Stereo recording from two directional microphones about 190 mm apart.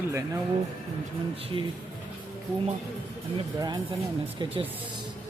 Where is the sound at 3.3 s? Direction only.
25° right (ahead or behind).